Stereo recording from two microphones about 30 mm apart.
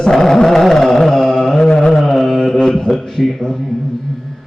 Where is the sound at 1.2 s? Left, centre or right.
Centre.